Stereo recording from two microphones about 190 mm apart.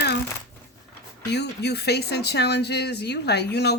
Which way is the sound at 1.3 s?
60° left (ahead or behind).